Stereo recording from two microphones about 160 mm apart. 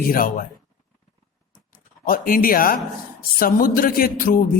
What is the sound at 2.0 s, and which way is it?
A man's voice, 60° left (ahead or behind).